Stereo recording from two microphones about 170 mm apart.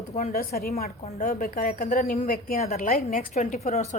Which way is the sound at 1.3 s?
55° left (ahead or behind).